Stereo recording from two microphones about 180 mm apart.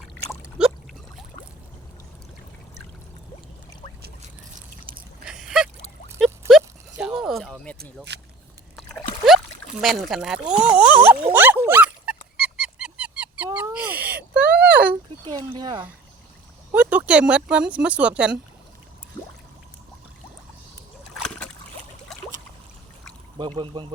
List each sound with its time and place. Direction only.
0.6 s a sound: 5° right (ahead or behind)
5.2 s a sound: 5° right (ahead or behind)
8.1 s speech: 70° right (ahead or behind)
9.8 s speech: centre (ahead or behind)
11.3 s dog: 10° right (ahead or behind)
14.0 s a sound: 10° right (ahead or behind)
15.3 s speech: 25° right (ahead or behind)
16.7 s speech: 5° right (ahead or behind)
21.2 s boat: 5° left (ahead or behind)
23.4 s speech: 25° right (ahead or behind)